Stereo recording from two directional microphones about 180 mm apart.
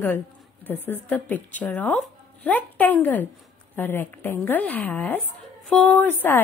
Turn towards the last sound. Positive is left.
turn(degrees=10)  # may be behind; listen again after turning